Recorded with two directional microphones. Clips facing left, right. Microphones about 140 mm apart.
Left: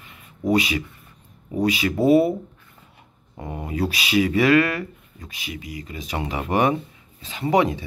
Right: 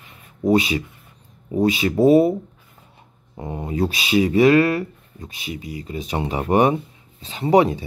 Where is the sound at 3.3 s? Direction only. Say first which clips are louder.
Right 3 dB; 25° right (ahead or behind).